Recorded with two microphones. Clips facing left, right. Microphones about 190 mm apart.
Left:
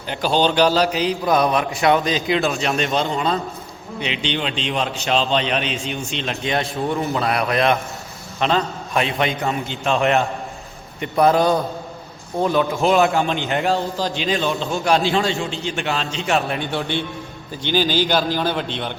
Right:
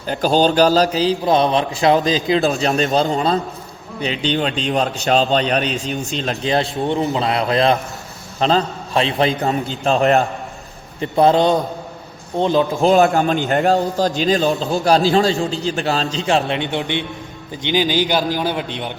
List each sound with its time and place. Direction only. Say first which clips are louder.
0.1 s a man's voice: right 3 dB; 40° right (ahead or behind)
11.0 s a man's voice: right 2 dB; 25° right (ahead or behind)
12.8 s a man's voice: right 4 dB; 35° right (ahead or behind); by 18.9 s 10° right (ahead or behind)